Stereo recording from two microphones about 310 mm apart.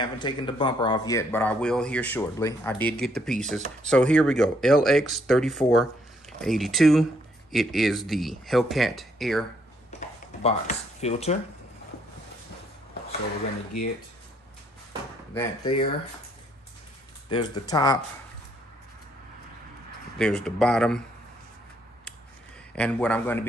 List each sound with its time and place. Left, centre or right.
0.0 s speech: centre
9.9 s a sound: left
15.3 s speech: centre
17.3 s speech: centre
20.2 s speech: centre
22.8 s speech: centre